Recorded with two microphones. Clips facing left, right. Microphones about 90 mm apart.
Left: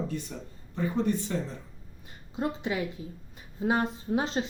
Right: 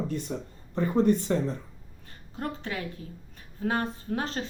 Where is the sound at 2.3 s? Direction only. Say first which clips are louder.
Left 4 dB; 15° left (ahead or behind).